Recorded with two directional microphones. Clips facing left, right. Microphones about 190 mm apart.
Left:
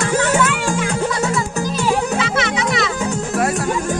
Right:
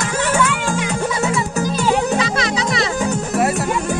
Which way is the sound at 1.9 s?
35° right (ahead or behind).